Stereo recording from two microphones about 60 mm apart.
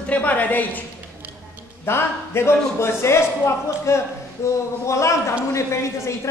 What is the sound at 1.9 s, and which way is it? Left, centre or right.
A man's voice, left.